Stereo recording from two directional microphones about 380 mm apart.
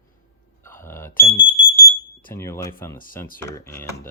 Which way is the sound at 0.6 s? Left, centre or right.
Centre.